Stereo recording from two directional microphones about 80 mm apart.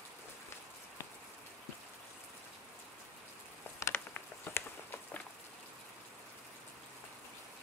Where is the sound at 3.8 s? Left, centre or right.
Left.